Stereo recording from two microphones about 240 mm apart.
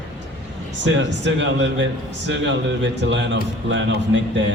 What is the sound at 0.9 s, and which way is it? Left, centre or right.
A man's voice, right.